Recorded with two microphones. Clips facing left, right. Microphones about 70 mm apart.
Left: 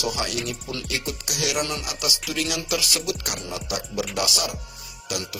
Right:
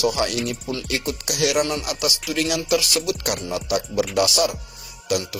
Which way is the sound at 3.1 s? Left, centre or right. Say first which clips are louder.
Right 5 dB; right.